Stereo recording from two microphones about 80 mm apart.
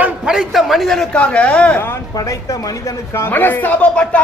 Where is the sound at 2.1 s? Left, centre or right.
Left.